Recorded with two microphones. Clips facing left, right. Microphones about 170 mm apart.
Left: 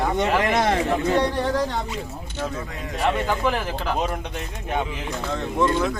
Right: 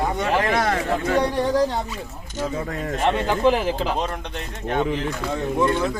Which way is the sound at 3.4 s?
20° right (ahead or behind).